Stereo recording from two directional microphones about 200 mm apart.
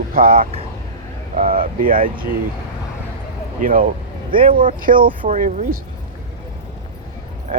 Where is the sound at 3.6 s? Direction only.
45° right (ahead or behind).